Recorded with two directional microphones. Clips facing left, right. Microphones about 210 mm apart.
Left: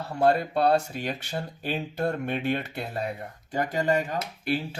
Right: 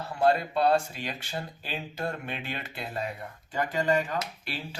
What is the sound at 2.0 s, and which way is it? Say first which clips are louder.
Speech: left 9 dB; 50° left (ahead or behind).